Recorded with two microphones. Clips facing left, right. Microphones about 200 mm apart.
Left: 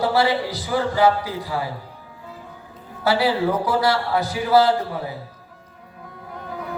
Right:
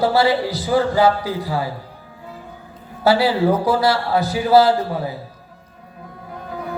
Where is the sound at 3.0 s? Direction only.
30° right (ahead or behind).